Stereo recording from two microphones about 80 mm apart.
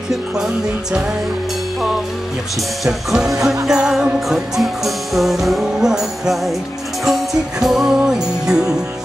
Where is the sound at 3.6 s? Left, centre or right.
Centre.